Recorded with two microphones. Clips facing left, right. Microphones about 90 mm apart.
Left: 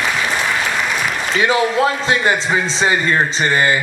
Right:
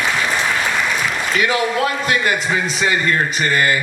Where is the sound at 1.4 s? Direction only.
25° left (ahead or behind).